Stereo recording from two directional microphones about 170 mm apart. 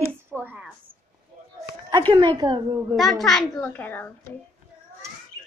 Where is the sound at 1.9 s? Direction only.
25° right (ahead or behind).